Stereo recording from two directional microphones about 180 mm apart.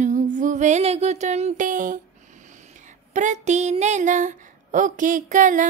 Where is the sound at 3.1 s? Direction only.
40° right (ahead or behind).